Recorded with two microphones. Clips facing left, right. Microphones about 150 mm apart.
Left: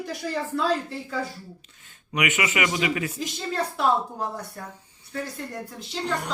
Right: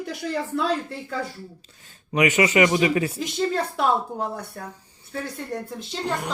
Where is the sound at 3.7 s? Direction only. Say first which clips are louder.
Right 1 dB; 60° right (ahead or behind).